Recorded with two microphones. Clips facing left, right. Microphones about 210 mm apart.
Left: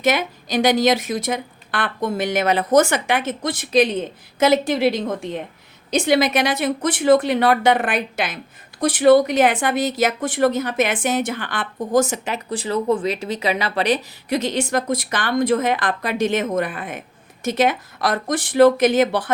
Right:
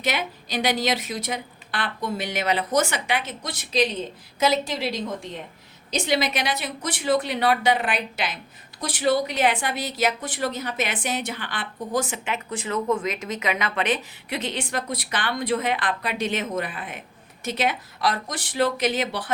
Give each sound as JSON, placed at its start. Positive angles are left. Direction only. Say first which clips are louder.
{"t": 0.0, "sound": "a woman's voice", "louder": "left 7 dB", "side_deg": 45}